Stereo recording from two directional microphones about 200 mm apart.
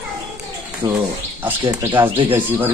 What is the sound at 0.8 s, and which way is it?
A man's voice, 20° right (ahead or behind).